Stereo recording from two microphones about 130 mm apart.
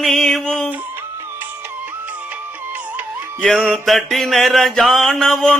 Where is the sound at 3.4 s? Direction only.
5° left (ahead or behind).